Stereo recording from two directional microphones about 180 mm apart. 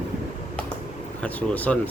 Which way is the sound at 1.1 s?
10° left (ahead or behind).